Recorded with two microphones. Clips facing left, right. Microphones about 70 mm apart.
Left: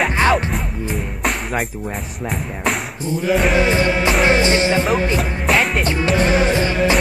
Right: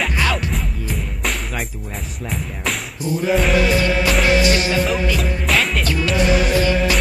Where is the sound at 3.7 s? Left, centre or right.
Left.